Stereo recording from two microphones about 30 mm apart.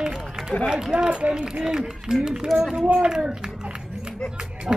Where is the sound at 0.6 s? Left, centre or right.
Right.